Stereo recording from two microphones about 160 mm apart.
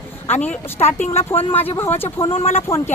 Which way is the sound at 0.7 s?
45° left (ahead or behind).